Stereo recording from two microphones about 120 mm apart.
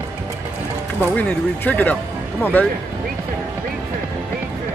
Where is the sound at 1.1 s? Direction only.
10° left (ahead or behind).